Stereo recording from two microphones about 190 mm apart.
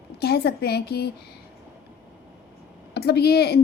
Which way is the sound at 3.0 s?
60° left (ahead or behind).